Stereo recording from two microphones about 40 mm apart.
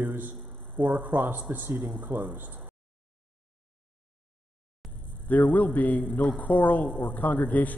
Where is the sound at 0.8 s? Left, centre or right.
Right.